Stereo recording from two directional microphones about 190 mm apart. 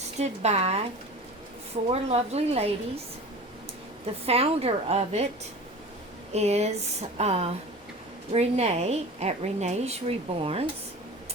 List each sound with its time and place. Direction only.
0.2 s a woman's voice: 35° right (ahead or behind)
4.0 s a woman's voice: 30° right (ahead or behind)
6.3 s a woman's voice: 35° right (ahead or behind)